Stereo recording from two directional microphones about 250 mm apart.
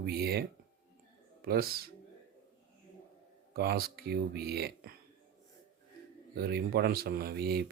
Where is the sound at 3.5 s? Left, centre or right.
Right.